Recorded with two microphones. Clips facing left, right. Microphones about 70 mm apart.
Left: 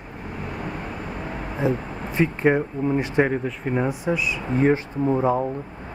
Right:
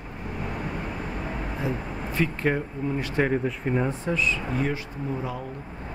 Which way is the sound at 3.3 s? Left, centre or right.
Centre.